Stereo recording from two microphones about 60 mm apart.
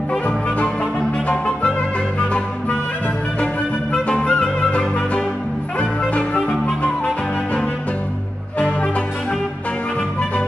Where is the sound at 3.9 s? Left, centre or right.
Centre.